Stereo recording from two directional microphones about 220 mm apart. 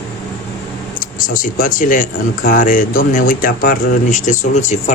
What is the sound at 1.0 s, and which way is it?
Speech, 40° left (ahead or behind).